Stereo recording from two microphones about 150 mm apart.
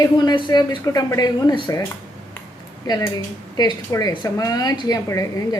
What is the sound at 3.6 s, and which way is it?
A woman's voice, 25° left (ahead or behind).